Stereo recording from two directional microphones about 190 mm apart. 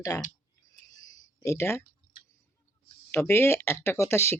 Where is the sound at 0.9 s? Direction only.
20° left (ahead or behind).